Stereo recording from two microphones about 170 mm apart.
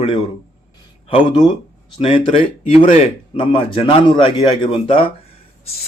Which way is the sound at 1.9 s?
35° left (ahead or behind).